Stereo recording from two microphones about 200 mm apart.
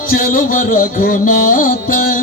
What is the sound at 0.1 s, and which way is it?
Music, 45° left (ahead or behind).